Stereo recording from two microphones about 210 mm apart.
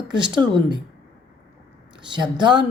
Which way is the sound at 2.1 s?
20° right (ahead or behind).